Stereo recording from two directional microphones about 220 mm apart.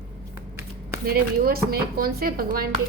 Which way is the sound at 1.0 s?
45° right (ahead or behind).